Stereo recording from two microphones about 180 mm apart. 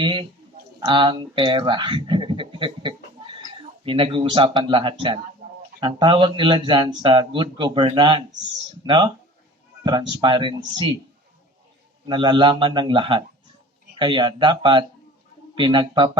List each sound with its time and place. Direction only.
0.0 s speech: 30° right (ahead or behind)
5.4 s a sound: 50° right (ahead or behind)
5.8 s speech: 25° right (ahead or behind)
10.2 s speech: 25° right (ahead or behind)
12.0 s speech: 25° right (ahead or behind)